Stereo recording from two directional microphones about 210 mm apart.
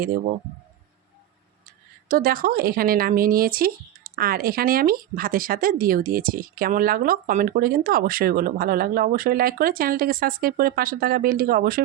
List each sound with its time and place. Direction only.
2.0 s speech: 45° right (ahead or behind)